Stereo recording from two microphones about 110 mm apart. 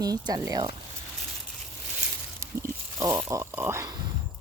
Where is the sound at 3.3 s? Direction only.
25° right (ahead or behind).